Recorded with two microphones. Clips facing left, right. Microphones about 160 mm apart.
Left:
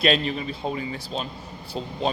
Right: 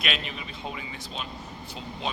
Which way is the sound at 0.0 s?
35° left (ahead or behind).